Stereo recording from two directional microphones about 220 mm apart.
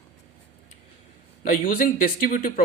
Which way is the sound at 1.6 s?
40° left (ahead or behind).